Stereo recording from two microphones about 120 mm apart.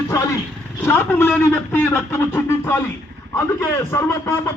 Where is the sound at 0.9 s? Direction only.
20° left (ahead or behind).